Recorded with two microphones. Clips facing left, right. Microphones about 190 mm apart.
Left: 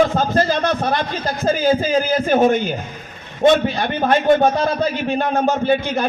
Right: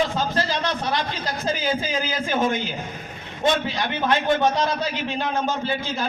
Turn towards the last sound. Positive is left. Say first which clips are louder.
# left 8 dB
turn(degrees=55)  # may be behind; listen again after turning